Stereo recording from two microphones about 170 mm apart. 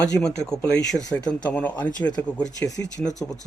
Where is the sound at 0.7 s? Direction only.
5° left (ahead or behind).